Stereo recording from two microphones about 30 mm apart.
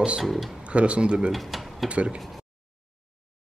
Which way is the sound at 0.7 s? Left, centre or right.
Right.